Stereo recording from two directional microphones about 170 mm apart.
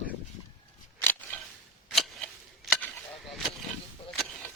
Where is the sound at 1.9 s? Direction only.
Centre (ahead or behind).